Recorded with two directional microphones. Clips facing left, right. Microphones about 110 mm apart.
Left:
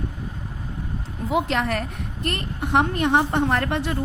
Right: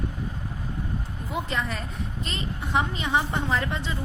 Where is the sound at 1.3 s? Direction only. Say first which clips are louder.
Left 7 dB; 85° left.